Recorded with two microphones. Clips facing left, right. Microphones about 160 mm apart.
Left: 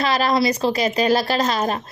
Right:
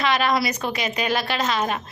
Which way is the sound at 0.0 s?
35° left (ahead or behind).